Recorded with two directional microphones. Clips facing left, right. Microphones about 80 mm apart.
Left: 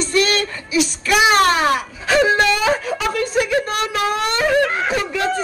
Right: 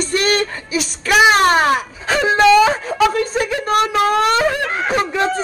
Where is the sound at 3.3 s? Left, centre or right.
Right.